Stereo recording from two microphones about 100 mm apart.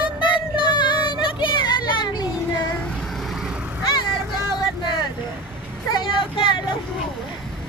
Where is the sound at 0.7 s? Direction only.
50° left (ahead or behind).